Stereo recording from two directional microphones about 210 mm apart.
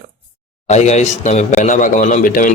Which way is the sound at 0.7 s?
35° left (ahead or behind).